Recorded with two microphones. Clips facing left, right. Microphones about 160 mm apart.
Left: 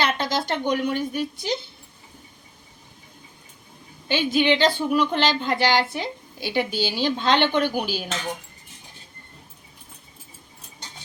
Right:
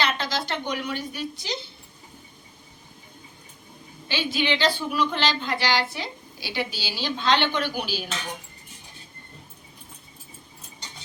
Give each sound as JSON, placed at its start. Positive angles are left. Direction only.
{"t": 0.0, "sound": "a woman's voice", "side_deg": 50}
{"t": 4.1, "sound": "speech", "side_deg": 50}